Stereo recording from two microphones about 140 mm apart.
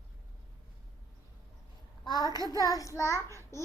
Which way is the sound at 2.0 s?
30° left (ahead or behind).